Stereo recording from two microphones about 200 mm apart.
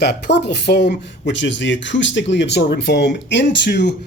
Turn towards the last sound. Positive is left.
turn(degrees=60)  # may be behind; listen again after turning